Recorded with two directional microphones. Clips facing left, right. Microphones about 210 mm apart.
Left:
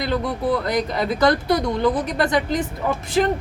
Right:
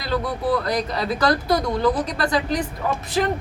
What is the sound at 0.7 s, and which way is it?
Speech, 20° left (ahead or behind).